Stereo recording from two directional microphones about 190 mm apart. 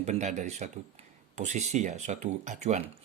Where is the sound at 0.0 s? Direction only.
35° right (ahead or behind).